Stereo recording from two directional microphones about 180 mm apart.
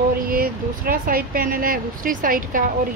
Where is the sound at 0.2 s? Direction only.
55° right (ahead or behind).